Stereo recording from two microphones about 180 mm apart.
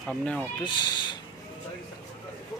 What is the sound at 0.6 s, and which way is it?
Speech, 25° left (ahead or behind).